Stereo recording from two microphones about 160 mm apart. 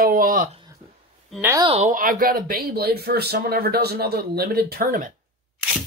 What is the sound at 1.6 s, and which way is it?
Speech, 40° right (ahead or behind).